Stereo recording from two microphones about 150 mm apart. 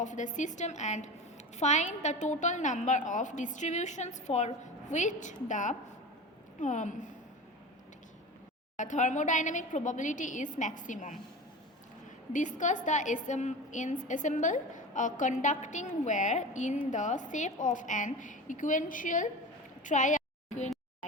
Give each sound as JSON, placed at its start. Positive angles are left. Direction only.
{"t": 0.0, "sound": "a woman's voice", "side_deg": 55}
{"t": 8.7, "sound": "a woman's voice", "side_deg": 55}
{"t": 12.3, "sound": "a woman's voice", "side_deg": 55}
{"t": 19.8, "sound": "a sound", "side_deg": 55}